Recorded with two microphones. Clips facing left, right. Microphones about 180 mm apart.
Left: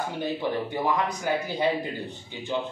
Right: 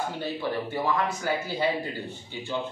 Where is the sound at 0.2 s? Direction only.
15° left (ahead or behind).